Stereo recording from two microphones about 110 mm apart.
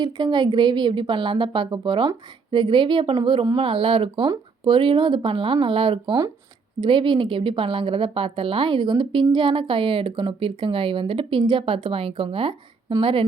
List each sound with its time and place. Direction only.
0.0 s a woman's voice: 45° right (ahead or behind)